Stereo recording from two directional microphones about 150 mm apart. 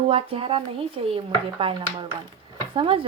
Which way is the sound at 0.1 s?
40° right (ahead or behind).